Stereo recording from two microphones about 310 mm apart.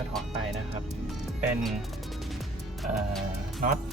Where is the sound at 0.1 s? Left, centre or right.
Centre.